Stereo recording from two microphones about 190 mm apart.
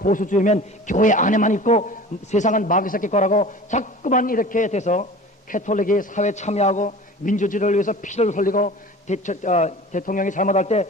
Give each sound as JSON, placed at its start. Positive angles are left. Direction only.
{"t": 0.0, "sound": "a man's voice", "side_deg": 45}